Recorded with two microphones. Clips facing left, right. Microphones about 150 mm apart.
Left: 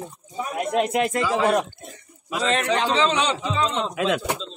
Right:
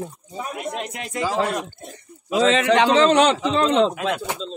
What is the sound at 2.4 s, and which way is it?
Speech, 90° right.